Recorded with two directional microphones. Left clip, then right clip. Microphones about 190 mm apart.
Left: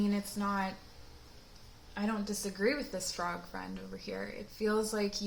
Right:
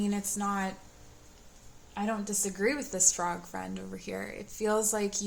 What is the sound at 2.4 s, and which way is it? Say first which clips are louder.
A woman's voice: right 2 dB; 35° right (ahead or behind).